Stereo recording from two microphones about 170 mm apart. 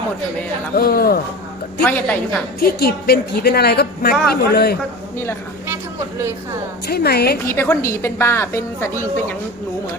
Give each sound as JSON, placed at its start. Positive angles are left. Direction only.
{"t": 0.8, "sound": "speech", "side_deg": 60}
{"t": 1.8, "sound": "a woman's voice", "side_deg": 10}
{"t": 2.6, "sound": "a woman's voice", "side_deg": 70}
{"t": 5.1, "sound": "a woman's voice", "side_deg": 15}
{"t": 5.6, "sound": "a sound", "side_deg": -15}
{"t": 6.8, "sound": "a woman's voice", "side_deg": 65}
{"t": 7.4, "sound": "a woman's voice", "side_deg": 15}